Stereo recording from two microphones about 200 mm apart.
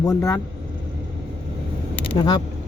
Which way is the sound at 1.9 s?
25° left (ahead or behind).